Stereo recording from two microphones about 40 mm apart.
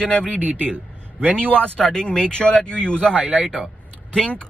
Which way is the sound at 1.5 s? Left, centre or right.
Left.